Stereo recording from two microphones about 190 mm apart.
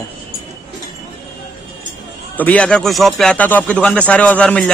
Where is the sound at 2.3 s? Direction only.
10° left (ahead or behind).